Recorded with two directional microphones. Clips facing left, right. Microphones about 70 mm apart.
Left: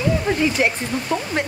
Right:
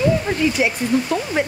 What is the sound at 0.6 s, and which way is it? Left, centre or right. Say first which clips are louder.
Speech: left 1 dB; left.